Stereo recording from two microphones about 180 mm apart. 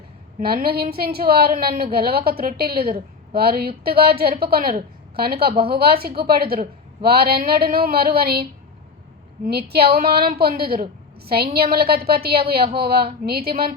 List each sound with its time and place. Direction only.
0.3 s a woman's voice: 60° right (ahead or behind)